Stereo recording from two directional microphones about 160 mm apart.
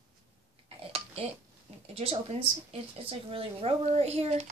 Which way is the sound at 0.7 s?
40° right (ahead or behind).